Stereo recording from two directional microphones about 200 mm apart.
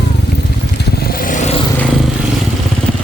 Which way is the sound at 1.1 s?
40° left (ahead or behind).